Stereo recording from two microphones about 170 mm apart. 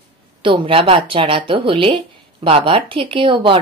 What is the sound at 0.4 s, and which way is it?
Speech, 30° right (ahead or behind).